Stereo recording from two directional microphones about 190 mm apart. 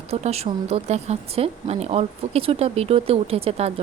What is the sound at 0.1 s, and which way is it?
Speech, 35° right (ahead or behind).